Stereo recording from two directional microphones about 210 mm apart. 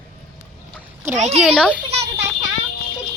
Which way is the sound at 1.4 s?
5° right (ahead or behind).